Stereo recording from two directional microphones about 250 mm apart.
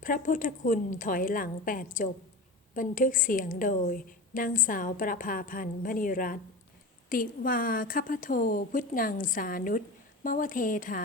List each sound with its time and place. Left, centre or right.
0.0 s a woman's voice: left